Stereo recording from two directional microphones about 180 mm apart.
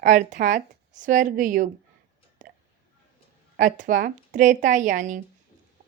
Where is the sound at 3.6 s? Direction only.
45° right (ahead or behind).